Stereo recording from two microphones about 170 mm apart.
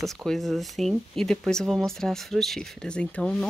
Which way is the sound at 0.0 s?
Centre (ahead or behind).